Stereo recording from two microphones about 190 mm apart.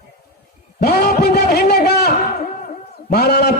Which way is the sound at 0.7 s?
55° left (ahead or behind).